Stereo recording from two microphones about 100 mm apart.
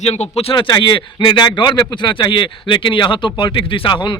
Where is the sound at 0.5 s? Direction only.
50° left (ahead or behind).